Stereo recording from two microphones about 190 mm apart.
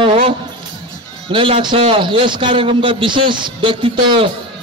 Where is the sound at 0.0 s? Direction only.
30° right (ahead or behind).